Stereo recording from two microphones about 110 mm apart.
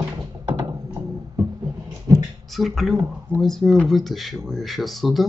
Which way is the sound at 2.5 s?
Centre (ahead or behind).